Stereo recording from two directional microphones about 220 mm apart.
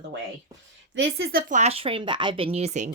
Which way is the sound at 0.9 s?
45° right (ahead or behind).